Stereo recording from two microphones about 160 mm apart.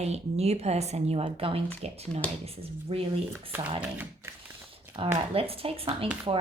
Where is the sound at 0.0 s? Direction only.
40° right (ahead or behind).